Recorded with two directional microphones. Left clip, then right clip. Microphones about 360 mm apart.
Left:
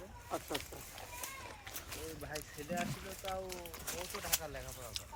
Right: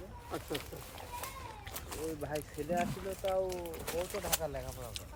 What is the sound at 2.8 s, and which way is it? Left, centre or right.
Speech, centre.